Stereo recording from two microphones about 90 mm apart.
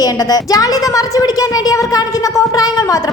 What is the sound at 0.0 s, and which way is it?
A woman's voice, 45° left (ahead or behind).